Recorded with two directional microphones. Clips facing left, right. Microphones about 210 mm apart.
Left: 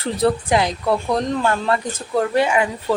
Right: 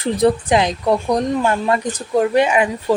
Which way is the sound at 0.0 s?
20° right (ahead or behind).